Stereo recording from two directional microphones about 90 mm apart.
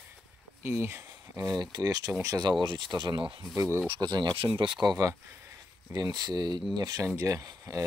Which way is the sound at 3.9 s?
55° right (ahead or behind).